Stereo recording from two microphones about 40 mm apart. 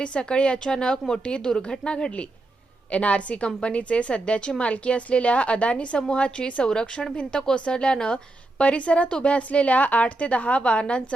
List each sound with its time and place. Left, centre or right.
0.0 s a woman's voice: left